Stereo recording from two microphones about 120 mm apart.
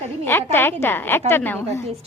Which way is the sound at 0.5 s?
20° left (ahead or behind).